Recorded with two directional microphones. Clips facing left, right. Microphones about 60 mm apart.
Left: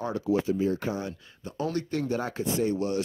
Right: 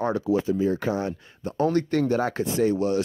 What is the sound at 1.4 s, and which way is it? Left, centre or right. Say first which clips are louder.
Speech: right 8 dB; right.